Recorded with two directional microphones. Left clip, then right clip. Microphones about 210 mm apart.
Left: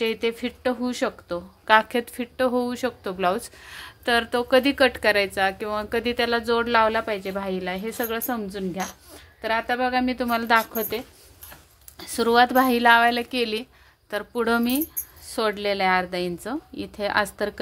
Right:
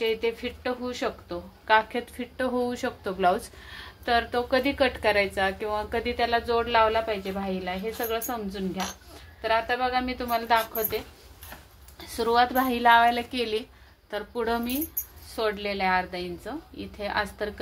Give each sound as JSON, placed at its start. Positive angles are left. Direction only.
{"t": 0.0, "sound": "a woman's voice", "side_deg": 55}
{"t": 12.0, "sound": "speech", "side_deg": 55}
{"t": 14.1, "sound": "a woman's voice", "side_deg": 45}